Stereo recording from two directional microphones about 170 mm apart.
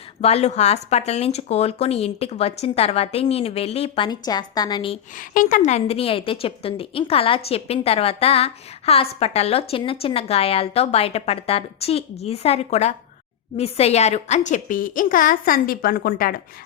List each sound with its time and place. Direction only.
0.2 s a woman's voice: 40° left (ahead or behind)
5.1 s a woman's voice: 50° left (ahead or behind)